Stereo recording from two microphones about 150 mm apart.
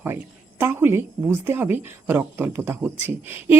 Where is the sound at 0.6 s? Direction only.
15° right (ahead or behind).